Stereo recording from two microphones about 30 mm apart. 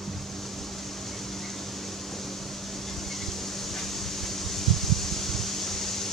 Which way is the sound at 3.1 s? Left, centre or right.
Centre.